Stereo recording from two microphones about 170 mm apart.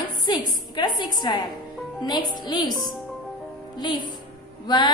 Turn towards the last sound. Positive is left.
turn(degrees=25)  # may be behind; listen again after turning